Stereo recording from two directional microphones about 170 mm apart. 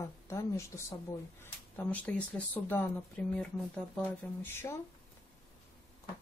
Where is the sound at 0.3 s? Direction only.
15° left (ahead or behind).